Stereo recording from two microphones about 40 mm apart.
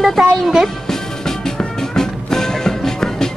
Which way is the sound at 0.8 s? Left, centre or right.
Centre.